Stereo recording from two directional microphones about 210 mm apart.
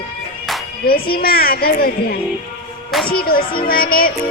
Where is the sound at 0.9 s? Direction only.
45° left (ahead or behind).